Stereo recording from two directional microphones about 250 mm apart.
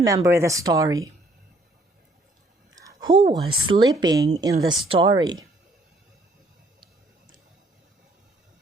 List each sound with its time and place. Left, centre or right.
0.0 s speech: centre
2.7 s a woman's voice: centre